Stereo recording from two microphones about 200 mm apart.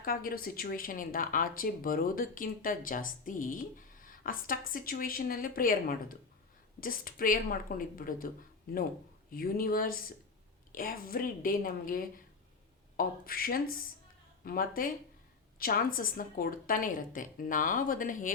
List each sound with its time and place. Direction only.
0.0 s a woman's voice: 45° left (ahead or behind)
9.3 s a woman's voice: 45° left (ahead or behind)